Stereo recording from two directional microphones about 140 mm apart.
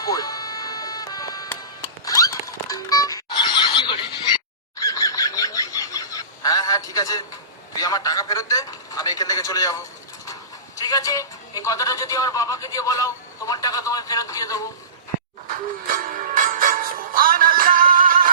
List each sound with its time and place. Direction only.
0.0 s music: 25° left (ahead or behind)
2.0 s horse: 25° left (ahead or behind)
4.8 s a sound: 25° left (ahead or behind)
7.8 s a man's voice: 25° left (ahead or behind)
10.8 s a man's voice: 25° left (ahead or behind)
15.4 s music: 80° right